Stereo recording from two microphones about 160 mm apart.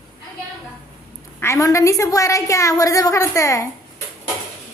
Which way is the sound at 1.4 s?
20° left (ahead or behind).